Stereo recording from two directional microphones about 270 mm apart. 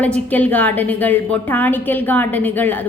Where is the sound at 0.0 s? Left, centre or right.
Centre.